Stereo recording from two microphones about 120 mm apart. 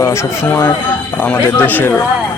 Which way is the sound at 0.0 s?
25° left (ahead or behind).